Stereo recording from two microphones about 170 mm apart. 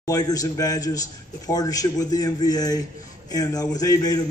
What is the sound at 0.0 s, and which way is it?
A man's voice, 20° left (ahead or behind).